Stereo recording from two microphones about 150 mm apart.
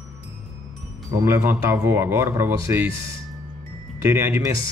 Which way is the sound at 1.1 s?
15° right (ahead or behind).